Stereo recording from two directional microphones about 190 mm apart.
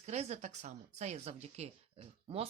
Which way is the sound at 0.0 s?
35° right (ahead or behind).